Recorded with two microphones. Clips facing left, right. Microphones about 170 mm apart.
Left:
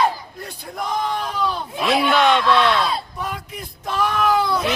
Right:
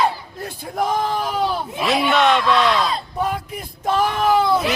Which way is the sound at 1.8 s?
Centre (ahead or behind).